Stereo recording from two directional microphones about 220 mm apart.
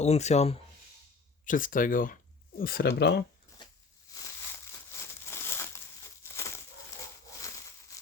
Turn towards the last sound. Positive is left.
turn(degrees=15)  # may be behind; listen again after turning